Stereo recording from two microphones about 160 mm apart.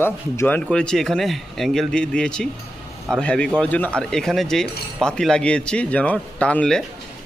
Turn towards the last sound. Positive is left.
turn(degrees=5)  # may be behind; listen again after turning